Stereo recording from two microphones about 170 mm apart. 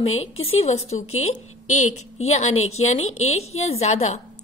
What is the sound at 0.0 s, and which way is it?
A woman's voice, 40° left (ahead or behind).